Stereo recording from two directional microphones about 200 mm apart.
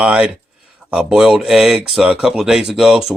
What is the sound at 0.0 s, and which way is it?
Speech, 5° right (ahead or behind).